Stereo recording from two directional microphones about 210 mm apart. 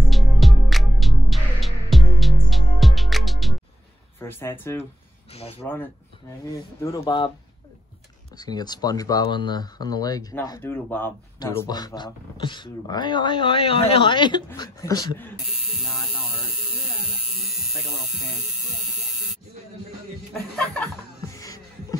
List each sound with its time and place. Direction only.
0.1 s music: centre (ahead or behind)
4.2 s speech: 10° left (ahead or behind)
5.3 s speech: 30° left (ahead or behind)
6.5 s speech: 15° left (ahead or behind)
8.4 s speech: 20° left (ahead or behind)
15.5 s speech: centre (ahead or behind)
18.3 s electric shaver: centre (ahead or behind)
20.5 s chuckle: 5° left (ahead or behind)
21.4 s music: 15° left (ahead or behind)